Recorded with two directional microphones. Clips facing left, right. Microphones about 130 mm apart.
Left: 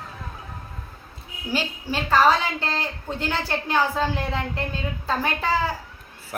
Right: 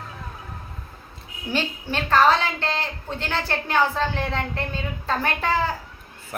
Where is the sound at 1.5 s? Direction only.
10° left (ahead or behind).